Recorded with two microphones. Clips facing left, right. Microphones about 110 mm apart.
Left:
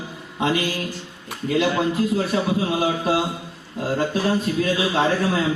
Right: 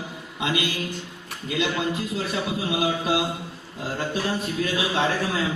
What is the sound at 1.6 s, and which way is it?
A man's voice, 35° left (ahead or behind).